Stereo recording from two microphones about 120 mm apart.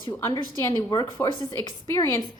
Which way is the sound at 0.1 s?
25° left (ahead or behind).